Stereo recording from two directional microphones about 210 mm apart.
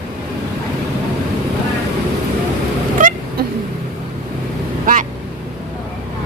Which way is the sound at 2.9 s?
40° right (ahead or behind).